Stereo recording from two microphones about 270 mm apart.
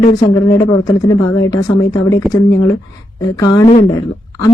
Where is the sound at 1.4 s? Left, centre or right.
Centre.